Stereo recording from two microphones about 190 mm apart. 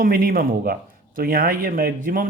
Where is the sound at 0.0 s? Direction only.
50° right (ahead or behind).